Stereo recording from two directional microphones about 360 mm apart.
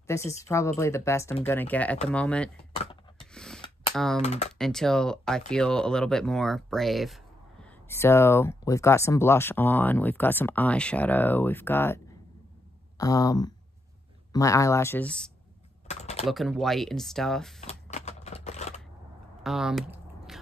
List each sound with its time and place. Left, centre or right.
0.0 s speech: centre
2.7 s speech: centre
3.2 s filing: centre
3.9 s speech: centre
4.2 s speech: centre
4.6 s speech: centre
15.9 s typing: centre
16.3 s speech: centre
17.6 s a sound: centre
19.4 s typing: centre